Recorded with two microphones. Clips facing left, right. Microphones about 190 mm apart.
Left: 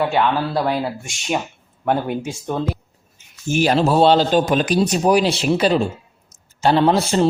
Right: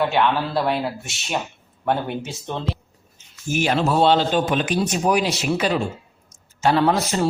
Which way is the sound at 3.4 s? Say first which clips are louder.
Left 4 dB; 30° left (ahead or behind).